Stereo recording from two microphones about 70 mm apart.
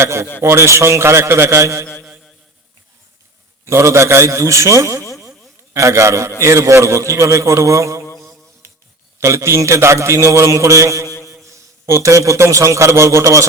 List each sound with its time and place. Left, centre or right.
0.0 s a man's voice: right
3.7 s a man's voice: right
8.6 s a sound: right
9.2 s a man's voice: right